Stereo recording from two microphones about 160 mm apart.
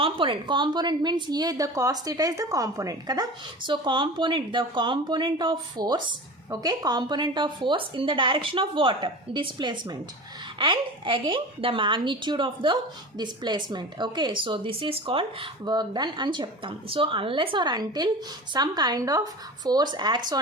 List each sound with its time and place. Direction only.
0.0 s a woman's voice: 35° right (ahead or behind)